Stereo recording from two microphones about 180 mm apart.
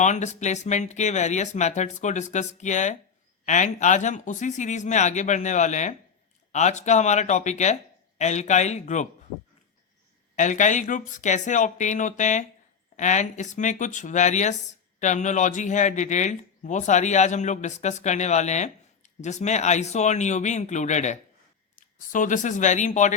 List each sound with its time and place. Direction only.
0.0 s speech: 40° left (ahead or behind)
10.3 s speech: 45° left (ahead or behind)